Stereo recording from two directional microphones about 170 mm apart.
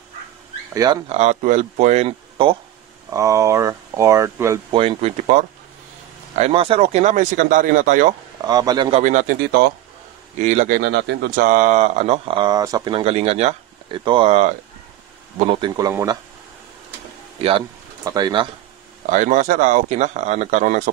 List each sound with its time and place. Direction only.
1.0 s speech: 40° right (ahead or behind)
3.1 s speech: 20° right (ahead or behind)
4.7 s speech: 35° right (ahead or behind)
8.4 s a man's voice: 25° right (ahead or behind)
10.4 s speech: 45° right (ahead or behind)
10.7 s speech: 75° right (ahead or behind)
11.4 s speech: 45° right (ahead or behind); by 16.2 s 15° right (ahead or behind)
17.4 s speech: 35° right (ahead or behind)
18.0 s a man's voice: 20° right (ahead or behind)
19.0 s speech: 45° right (ahead or behind)